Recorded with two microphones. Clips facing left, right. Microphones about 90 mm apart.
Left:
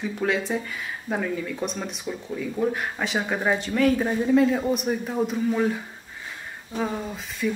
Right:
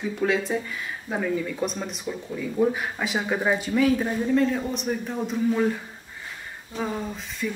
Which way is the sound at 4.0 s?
10° left (ahead or behind).